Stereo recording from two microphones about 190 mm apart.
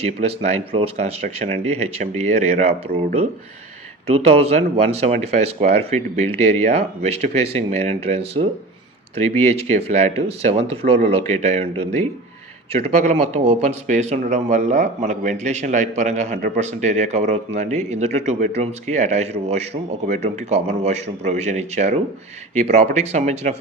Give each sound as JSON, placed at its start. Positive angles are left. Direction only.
{"t": 0.2, "sound": "speech", "side_deg": -35}